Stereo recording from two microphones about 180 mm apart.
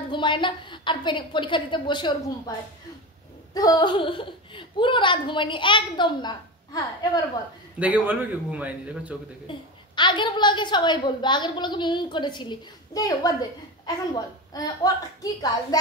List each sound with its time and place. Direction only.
0.1 s a woman's voice: 25° left (ahead or behind)
3.5 s a woman's voice: 20° left (ahead or behind)
7.8 s speech: 10° right (ahead or behind)
9.5 s a woman's voice: 25° left (ahead or behind)